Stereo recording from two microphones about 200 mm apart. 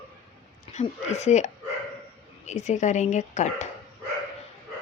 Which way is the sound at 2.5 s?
35° left (ahead or behind).